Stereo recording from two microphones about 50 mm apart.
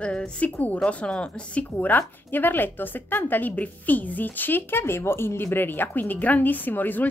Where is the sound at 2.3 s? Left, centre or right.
Left.